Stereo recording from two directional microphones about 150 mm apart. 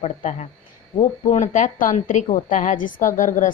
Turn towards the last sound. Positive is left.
turn(degrees=60)  # may be behind; listen again after turning